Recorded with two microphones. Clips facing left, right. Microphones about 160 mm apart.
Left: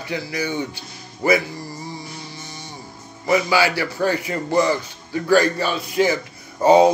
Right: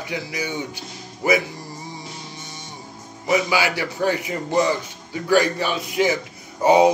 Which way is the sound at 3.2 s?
15° right (ahead or behind).